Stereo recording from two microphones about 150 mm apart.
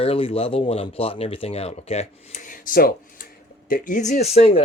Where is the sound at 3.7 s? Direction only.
65° left (ahead or behind); by 4.6 s 45° left (ahead or behind).